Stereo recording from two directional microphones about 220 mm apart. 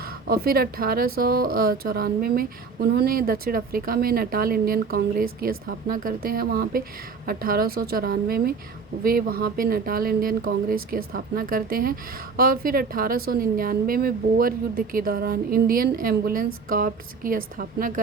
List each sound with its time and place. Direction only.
0.0 s a woman's voice: 40° right (ahead or behind)